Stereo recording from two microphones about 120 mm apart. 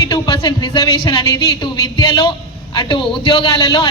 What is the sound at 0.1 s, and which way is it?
A man's voice, 40° left (ahead or behind).